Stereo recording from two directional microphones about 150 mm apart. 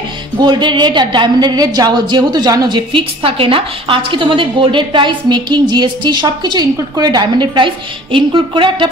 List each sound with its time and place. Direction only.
0.4 s a woman's voice: 30° right (ahead or behind)